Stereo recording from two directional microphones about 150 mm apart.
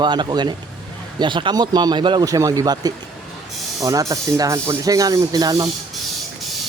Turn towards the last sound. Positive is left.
turn(degrees=-25)  # may be behind; listen again after turning